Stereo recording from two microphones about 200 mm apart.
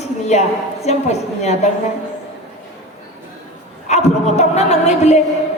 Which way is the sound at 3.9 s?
35° left (ahead or behind).